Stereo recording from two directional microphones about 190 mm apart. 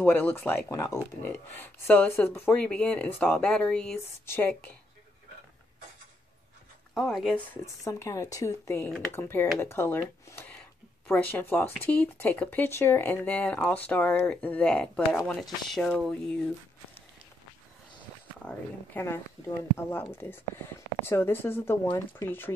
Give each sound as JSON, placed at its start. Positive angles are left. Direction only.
{"t": 0.0, "sound": "speech", "side_deg": 10}
{"t": 6.9, "sound": "speech", "side_deg": 0}
{"t": 7.5, "sound": "speech", "side_deg": 15}
{"t": 18.4, "sound": "speech", "side_deg": 10}